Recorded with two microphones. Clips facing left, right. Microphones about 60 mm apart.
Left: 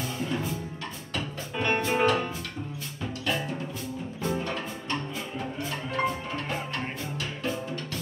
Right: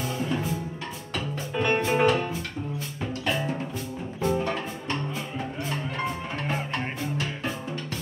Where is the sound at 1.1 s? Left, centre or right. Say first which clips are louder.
Right 3 dB; centre.